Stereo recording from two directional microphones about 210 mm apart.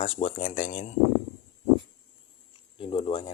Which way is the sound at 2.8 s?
25° left (ahead or behind).